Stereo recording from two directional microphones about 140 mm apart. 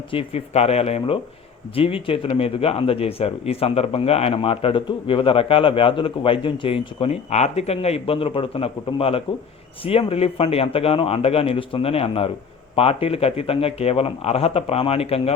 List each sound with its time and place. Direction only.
0.1 s a man's voice: 45° left (ahead or behind)